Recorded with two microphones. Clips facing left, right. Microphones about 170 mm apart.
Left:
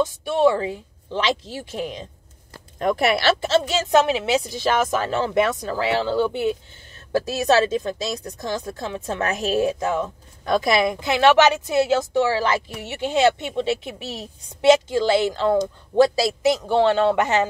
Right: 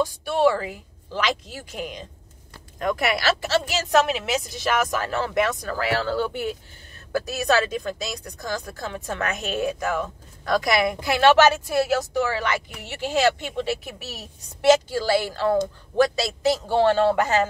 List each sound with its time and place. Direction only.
0.0 s speech: 25° left (ahead or behind)
16.9 s speech: 15° left (ahead or behind)